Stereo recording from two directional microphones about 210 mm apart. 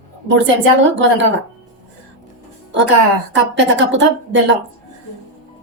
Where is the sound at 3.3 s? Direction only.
60° right (ahead or behind).